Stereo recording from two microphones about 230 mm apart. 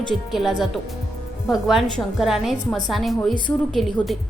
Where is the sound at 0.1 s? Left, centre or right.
Centre.